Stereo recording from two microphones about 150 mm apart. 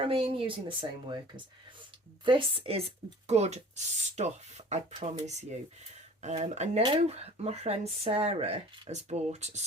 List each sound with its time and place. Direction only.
0.0 s speech: 35° right (ahead or behind)
2.2 s speech: 35° right (ahead or behind)
6.8 s speech: 40° right (ahead or behind)